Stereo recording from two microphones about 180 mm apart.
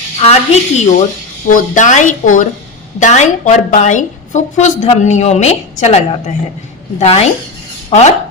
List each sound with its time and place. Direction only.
0.3 s a woman's voice: 35° left (ahead or behind)